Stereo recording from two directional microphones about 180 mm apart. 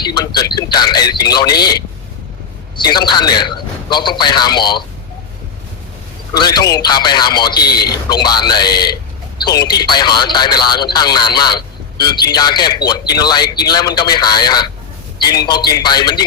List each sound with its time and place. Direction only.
0.0 s a man's voice: 25° left (ahead or behind)
2.8 s speech: 25° left (ahead or behind)
6.3 s speech: 25° left (ahead or behind)